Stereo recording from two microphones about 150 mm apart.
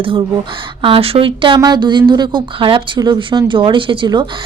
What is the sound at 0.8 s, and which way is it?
A woman's voice, 35° right (ahead or behind).